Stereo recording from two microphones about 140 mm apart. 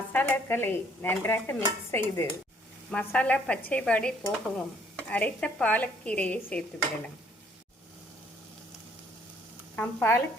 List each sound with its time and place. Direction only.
0.1 s dishes: 15° left (ahead or behind)
9.7 s dishes: 15° left (ahead or behind)